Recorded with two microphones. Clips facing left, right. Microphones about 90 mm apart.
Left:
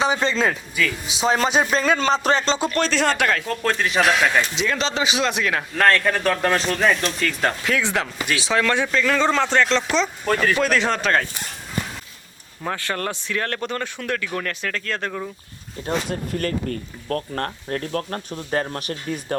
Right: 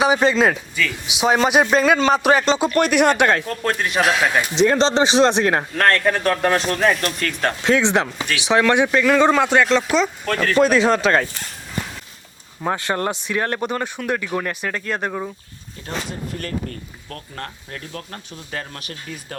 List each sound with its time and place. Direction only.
0.0 s speech: 15° right (ahead or behind)
4.8 s speech: 30° right (ahead or behind)
5.7 s speech: centre (ahead or behind)
7.6 s speech: 20° right (ahead or behind)
10.2 s speech: 5° left (ahead or behind)
10.6 s speech: 20° right (ahead or behind)
12.6 s speech: 20° right (ahead or behind)
17.1 s speech: 45° left (ahead or behind)